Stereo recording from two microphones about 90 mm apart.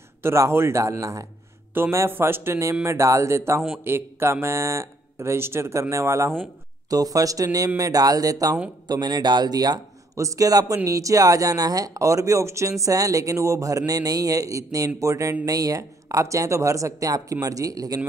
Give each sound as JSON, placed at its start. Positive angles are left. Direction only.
{"t": 0.2, "sound": "speech", "side_deg": -30}
{"t": 6.9, "sound": "speech", "side_deg": -40}
{"t": 8.8, "sound": "a man's voice", "side_deg": -50}